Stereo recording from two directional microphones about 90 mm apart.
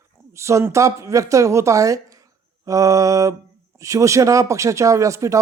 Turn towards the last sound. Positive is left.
turn(degrees=-35)  # may be behind; listen again after turning